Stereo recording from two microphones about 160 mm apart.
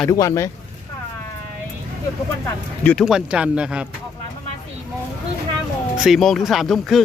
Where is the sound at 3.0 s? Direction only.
5° right (ahead or behind).